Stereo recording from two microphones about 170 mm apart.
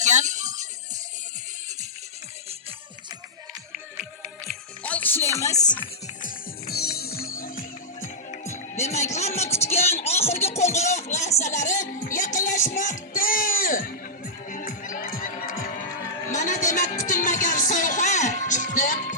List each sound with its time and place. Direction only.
0.0 s music: 45° right (ahead or behind)
4.4 s music: 10° left (ahead or behind)
6.2 s music: 65° left (ahead or behind)
8.0 s music: 45° left (ahead or behind)
8.8 s speech: 40° left (ahead or behind)
14.5 s music: 50° left (ahead or behind)
16.3 s a sound: 45° left (ahead or behind)
16.6 s music: 50° left (ahead or behind)